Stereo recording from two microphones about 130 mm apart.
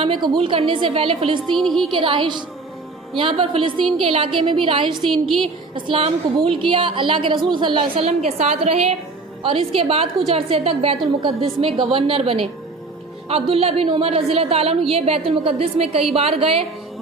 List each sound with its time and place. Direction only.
0.0 s a woman's voice: 40° right (ahead or behind)
1.5 s speech: centre (ahead or behind)
1.9 s a woman's voice: 40° right (ahead or behind)
8.0 s a woman's voice: 55° right (ahead or behind)